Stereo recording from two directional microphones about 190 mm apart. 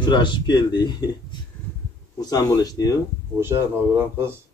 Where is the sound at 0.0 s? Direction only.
25° left (ahead or behind).